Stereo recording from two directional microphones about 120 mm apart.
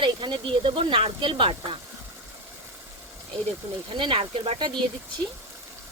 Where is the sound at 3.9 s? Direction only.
45° right (ahead or behind).